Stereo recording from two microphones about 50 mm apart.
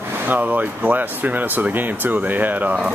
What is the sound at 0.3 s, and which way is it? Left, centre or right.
Speech, right.